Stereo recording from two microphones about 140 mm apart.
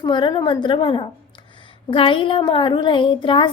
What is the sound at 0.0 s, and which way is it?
A woman's voice, 35° left (ahead or behind).